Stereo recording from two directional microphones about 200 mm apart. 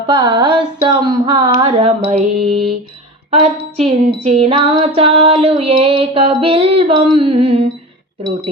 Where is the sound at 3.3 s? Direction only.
30° right (ahead or behind).